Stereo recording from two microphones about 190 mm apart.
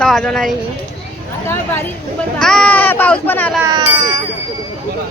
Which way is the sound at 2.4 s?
5° left (ahead or behind).